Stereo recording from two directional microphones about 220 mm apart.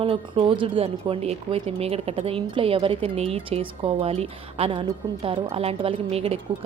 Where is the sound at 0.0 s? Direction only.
25° right (ahead or behind).